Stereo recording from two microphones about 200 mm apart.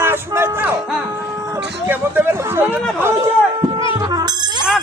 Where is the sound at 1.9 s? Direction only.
10° right (ahead or behind).